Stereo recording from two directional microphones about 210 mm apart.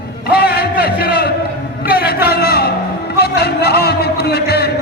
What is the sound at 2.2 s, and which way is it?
Music, 50° left (ahead or behind).